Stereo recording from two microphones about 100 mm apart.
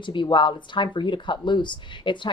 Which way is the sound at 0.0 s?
55° left (ahead or behind).